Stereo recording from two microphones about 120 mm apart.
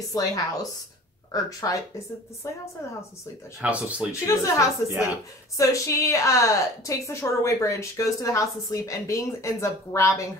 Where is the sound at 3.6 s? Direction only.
10° right (ahead or behind).